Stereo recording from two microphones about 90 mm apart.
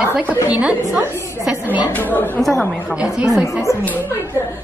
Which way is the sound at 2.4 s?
5° left (ahead or behind).